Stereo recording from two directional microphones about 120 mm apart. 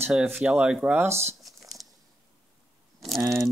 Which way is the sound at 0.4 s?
5° right (ahead or behind).